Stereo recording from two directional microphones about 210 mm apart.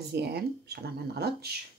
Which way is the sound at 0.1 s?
50° right (ahead or behind).